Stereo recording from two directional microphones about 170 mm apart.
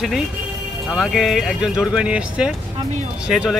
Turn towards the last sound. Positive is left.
turn(degrees=-5)  # may be behind; listen again after turning